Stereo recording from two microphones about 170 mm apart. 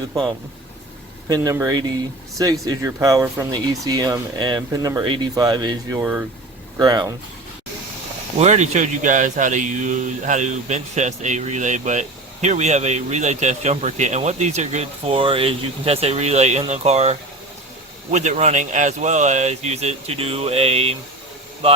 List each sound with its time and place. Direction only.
0.1 s speech: 25° right (ahead or behind)
1.5 s speech: 20° right (ahead or behind)
6.0 s speech: 5° right (ahead or behind)
6.7 s speech: 25° right (ahead or behind)
8.4 s speech: 40° right (ahead or behind)